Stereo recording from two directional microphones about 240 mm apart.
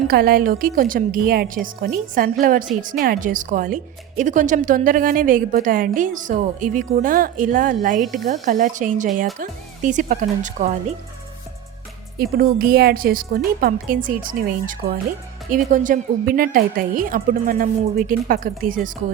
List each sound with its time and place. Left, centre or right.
0.1 s a woman's voice: right
12.2 s a woman's voice: right